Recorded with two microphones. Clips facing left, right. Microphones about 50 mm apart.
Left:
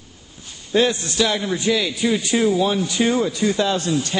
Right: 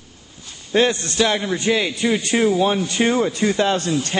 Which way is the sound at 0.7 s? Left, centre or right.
Right.